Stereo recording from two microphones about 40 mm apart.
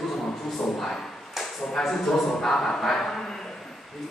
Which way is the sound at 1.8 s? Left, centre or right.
Centre.